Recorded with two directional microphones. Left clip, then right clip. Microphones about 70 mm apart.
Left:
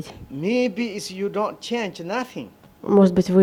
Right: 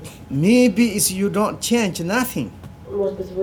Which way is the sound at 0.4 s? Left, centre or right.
Left.